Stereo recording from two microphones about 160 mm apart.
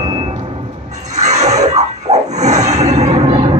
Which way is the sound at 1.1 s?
45° right (ahead or behind).